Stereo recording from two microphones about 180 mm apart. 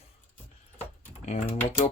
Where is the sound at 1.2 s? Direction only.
45° left (ahead or behind).